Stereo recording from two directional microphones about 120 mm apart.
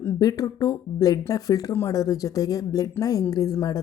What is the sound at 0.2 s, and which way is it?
A woman's voice, 30° left (ahead or behind).